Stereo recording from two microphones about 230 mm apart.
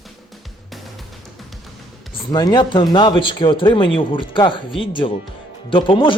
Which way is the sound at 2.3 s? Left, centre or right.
Centre.